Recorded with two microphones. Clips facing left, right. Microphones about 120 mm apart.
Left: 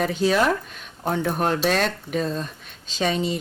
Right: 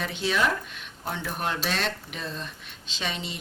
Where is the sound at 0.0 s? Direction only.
40° left (ahead or behind).